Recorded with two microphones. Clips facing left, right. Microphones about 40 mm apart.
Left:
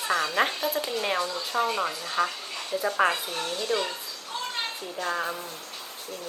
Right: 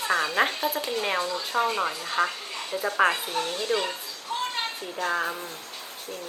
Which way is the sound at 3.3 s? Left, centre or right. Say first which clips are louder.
Right 2 dB; right.